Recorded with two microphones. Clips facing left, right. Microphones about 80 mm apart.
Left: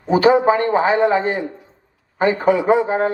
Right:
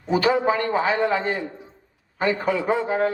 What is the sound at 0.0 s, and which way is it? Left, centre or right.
A man's voice, left.